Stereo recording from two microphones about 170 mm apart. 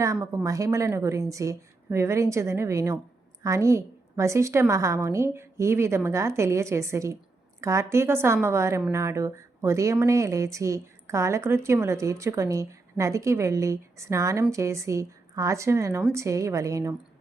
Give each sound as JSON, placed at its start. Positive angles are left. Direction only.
{"t": 0.0, "sound": "speech", "side_deg": -15}